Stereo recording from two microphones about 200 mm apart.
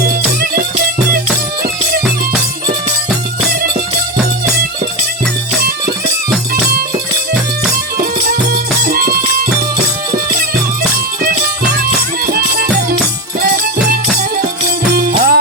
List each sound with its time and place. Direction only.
7.9 s music: 45° right (ahead or behind)
11.8 s music: 45° right (ahead or behind)
14.9 s music: 45° right (ahead or behind)